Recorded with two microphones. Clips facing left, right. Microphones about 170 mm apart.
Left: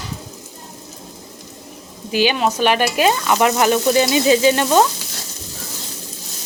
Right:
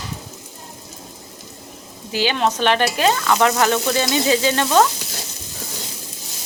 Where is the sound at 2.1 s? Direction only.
15° left (ahead or behind).